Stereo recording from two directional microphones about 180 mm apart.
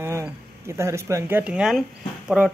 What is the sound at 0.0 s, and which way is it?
Speech, 15° right (ahead or behind).